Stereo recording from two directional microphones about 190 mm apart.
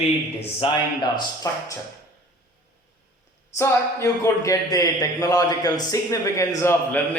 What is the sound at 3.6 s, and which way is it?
A man's voice, 15° left (ahead or behind).